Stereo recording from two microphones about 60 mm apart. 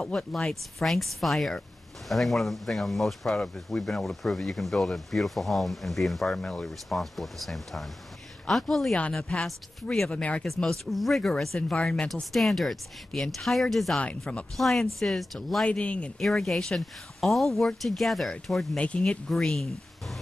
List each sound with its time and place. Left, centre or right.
0.0 s speech: centre
6.4 s speech: centre
6.9 s speech: centre
10.4 s speech: centre
11.7 s speech: centre
12.1 s speech: centre
15.6 s speech: centre
16.2 s speech: centre
18.8 s speech: centre
19.3 s speech: centre